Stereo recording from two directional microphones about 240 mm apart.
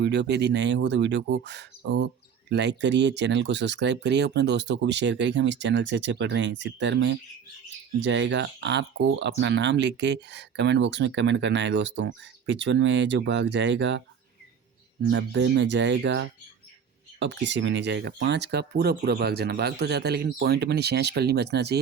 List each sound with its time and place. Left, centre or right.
0.0 s speech: right
15.0 s speech: right